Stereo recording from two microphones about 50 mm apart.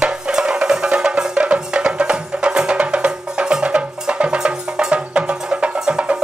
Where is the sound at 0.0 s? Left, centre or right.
Centre.